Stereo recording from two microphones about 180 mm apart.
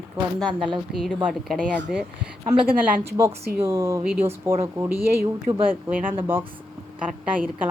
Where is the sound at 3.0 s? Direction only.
15° right (ahead or behind).